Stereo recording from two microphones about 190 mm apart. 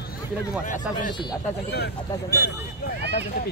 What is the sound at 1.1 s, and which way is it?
Speech, 20° left (ahead or behind).